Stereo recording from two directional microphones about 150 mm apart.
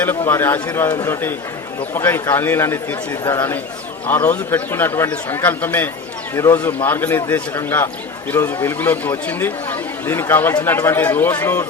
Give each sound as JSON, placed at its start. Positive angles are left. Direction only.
{"t": 0.0, "sound": "speech", "side_deg": 15}